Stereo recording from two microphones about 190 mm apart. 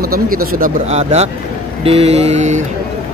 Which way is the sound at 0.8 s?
35° right (ahead or behind).